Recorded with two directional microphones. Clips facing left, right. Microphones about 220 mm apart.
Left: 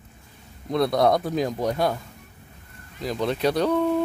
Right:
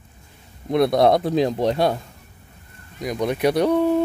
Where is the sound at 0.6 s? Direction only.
25° right (ahead or behind).